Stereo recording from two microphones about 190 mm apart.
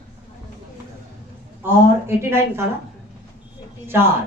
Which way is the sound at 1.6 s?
15° right (ahead or behind).